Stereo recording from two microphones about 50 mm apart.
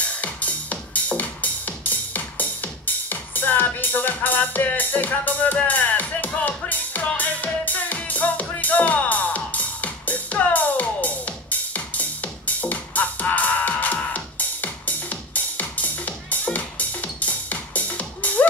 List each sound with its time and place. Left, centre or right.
0.0 s music: left